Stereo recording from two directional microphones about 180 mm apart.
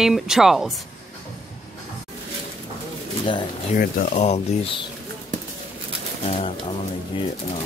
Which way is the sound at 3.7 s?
45° left (ahead or behind).